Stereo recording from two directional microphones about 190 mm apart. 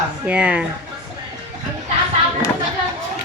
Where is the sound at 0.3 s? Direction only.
5° right (ahead or behind).